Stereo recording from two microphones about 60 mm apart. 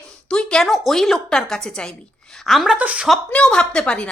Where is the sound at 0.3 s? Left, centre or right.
Centre.